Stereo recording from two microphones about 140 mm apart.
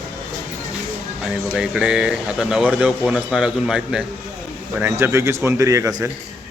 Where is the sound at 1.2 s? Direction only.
5° right (ahead or behind).